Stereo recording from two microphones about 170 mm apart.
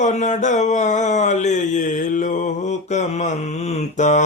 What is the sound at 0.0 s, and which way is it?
Mantra, 45° left (ahead or behind).